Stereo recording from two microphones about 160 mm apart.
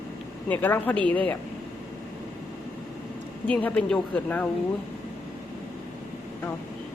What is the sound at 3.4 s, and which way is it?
A woman's voice, 10° left (ahead or behind).